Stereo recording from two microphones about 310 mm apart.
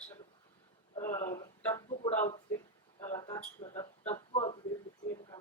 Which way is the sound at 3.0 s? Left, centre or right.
Centre.